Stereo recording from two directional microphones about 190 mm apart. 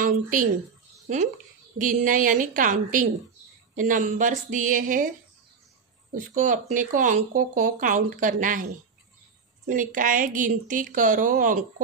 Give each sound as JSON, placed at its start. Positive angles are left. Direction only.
{"t": 0.0, "sound": "a woman's voice", "side_deg": -45}
{"t": 6.1, "sound": "speech", "side_deg": -45}
{"t": 9.7, "sound": "speech", "side_deg": -45}